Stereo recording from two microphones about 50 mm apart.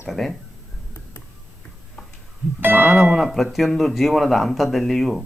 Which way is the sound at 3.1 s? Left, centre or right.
Centre.